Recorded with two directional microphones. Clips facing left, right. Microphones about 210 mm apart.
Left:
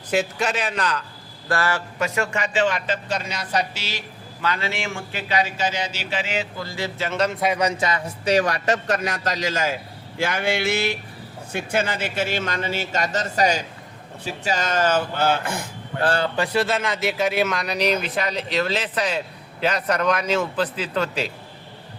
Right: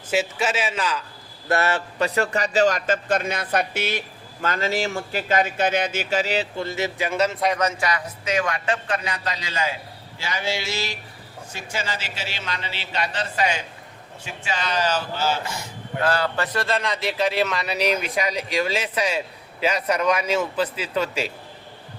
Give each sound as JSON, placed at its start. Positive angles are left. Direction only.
{"t": 0.1, "sound": "a man's voice", "side_deg": -5}
{"t": 1.5, "sound": "a man's voice", "side_deg": -25}
{"t": 10.2, "sound": "a man's voice", "side_deg": 55}
{"t": 16.0, "sound": "a man's voice", "side_deg": 30}